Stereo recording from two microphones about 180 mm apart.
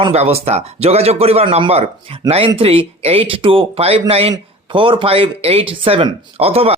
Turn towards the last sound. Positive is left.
turn(degrees=-35)  # may be behind; listen again after turning